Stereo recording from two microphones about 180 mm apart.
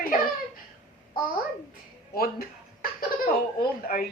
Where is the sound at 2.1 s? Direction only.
55° left (ahead or behind).